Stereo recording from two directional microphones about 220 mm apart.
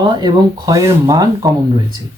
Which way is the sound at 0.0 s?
20° right (ahead or behind).